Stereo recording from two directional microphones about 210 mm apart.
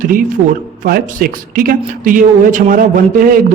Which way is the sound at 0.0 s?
40° right (ahead or behind).